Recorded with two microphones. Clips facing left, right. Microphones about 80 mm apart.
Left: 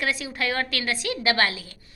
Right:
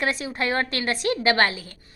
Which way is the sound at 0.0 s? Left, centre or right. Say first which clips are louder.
Right 2 dB; right.